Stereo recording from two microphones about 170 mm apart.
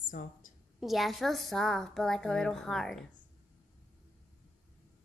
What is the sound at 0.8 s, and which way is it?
A woman's voice, centre (ahead or behind).